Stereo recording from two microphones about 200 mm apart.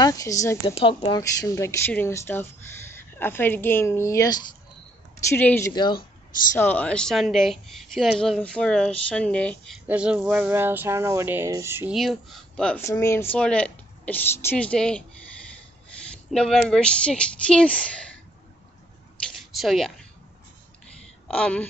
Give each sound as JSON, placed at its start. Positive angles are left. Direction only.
{"t": 0.0, "sound": "a woman's voice", "side_deg": 15}
{"t": 0.7, "sound": "a woman's voice", "side_deg": 30}
{"t": 9.8, "sound": "a sound", "side_deg": -5}
{"t": 11.9, "sound": "a woman's voice", "side_deg": 0}
{"t": 16.1, "sound": "a woman's voice", "side_deg": 0}
{"t": 19.5, "sound": "speech", "side_deg": 0}
{"t": 21.3, "sound": "a woman's voice", "side_deg": 5}